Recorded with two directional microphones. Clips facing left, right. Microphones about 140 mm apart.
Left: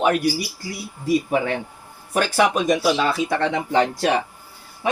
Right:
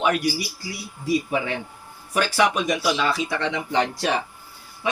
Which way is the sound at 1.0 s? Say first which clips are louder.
Left 3 dB; 50° left (ahead or behind).